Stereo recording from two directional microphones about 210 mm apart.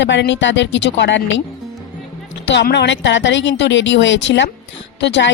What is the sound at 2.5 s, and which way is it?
Speech, 55° left (ahead or behind).